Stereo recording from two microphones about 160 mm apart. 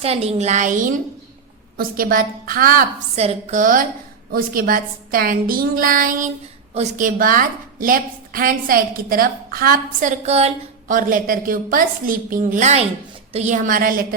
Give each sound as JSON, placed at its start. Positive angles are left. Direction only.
{"t": 0.0, "sound": "a woman's voice", "side_deg": -40}
{"t": 1.7, "sound": "a woman's voice", "side_deg": -65}
{"t": 3.2, "sound": "a woman's voice", "side_deg": -45}
{"t": 10.9, "sound": "a woman's voice", "side_deg": -60}